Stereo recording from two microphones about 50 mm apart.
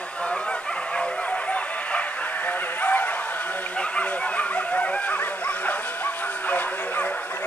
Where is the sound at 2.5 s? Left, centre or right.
Left.